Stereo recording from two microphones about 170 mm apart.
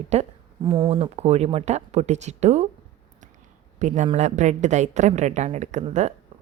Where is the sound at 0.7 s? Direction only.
30° right (ahead or behind).